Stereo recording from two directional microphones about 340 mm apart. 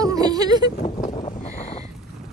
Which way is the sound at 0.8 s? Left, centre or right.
Centre.